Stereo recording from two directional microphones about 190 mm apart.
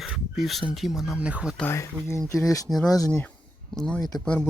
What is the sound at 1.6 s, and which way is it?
Speech, 15° left (ahead or behind).